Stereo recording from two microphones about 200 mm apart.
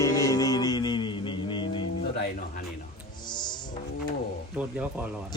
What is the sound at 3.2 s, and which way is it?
Music, 20° left (ahead or behind).